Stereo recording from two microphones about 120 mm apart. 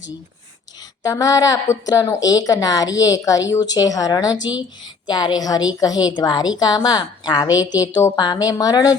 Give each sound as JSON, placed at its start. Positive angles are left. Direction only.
{"t": 1.0, "sound": "a woman's voice", "side_deg": 30}